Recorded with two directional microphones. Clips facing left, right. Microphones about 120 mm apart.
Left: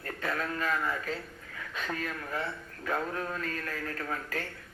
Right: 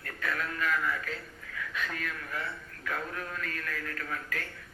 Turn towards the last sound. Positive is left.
turn(degrees=30)  # may be behind; listen again after turning